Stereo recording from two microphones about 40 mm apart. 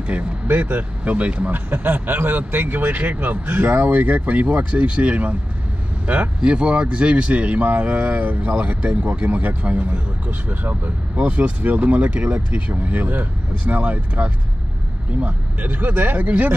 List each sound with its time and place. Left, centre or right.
0.1 s speech: right
0.5 s speech: right
1.5 s speech: right
6.4 s speech: right